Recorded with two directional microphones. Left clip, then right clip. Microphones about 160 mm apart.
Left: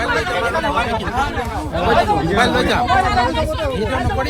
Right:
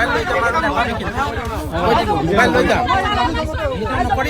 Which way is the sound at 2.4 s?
15° left (ahead or behind).